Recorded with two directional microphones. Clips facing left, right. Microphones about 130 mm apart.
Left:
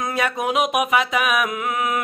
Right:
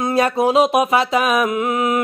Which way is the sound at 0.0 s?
35° right (ahead or behind).